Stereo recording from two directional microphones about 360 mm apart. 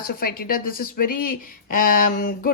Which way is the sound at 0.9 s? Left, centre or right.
Left.